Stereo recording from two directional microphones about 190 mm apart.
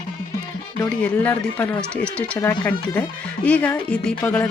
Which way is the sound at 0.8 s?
10° left (ahead or behind).